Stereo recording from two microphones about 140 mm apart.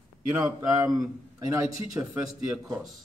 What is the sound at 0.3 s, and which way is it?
Speech, 10° right (ahead or behind).